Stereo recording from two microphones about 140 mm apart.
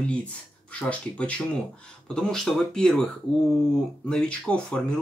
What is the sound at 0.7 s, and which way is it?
Speech, 10° left (ahead or behind).